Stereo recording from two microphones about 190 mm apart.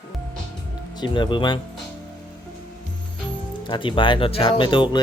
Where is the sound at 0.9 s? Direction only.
25° left (ahead or behind).